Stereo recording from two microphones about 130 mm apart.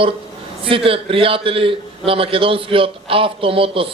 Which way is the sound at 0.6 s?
45° right (ahead or behind).